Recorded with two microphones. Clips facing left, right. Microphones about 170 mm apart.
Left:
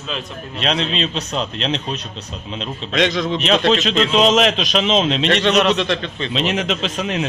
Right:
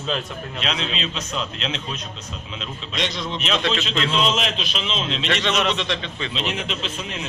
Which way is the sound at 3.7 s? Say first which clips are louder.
Left 7 dB; 90° left.